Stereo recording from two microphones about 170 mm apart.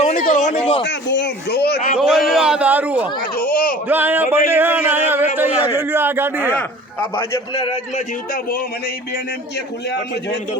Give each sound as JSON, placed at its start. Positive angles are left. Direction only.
{"t": 0.0, "sound": "a sound", "side_deg": 45}
{"t": 0.9, "sound": "speech", "side_deg": 90}
{"t": 2.0, "sound": "a man's voice", "side_deg": 0}
{"t": 3.3, "sound": "a sound", "side_deg": 60}
{"t": 3.8, "sound": "a man's voice", "side_deg": -10}
{"t": 6.6, "sound": "a man's voice", "side_deg": 15}
{"t": 7.6, "sound": "a man's voice", "side_deg": 35}